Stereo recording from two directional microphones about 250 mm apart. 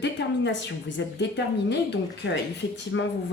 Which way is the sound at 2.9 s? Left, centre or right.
Left.